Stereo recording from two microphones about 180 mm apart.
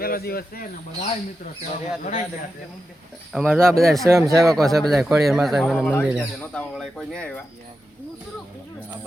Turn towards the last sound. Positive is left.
turn(degrees=5)  # may be behind; listen again after turning